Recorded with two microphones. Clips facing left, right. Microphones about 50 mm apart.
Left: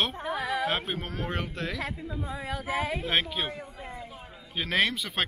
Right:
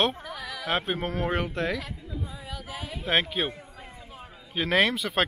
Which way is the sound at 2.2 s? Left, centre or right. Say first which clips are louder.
Left 5 dB; left.